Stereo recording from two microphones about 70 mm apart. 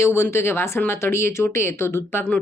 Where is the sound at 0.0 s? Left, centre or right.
Left.